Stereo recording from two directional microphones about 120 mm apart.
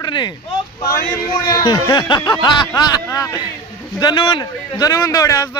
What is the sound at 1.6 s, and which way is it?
Speech, 35° left (ahead or behind).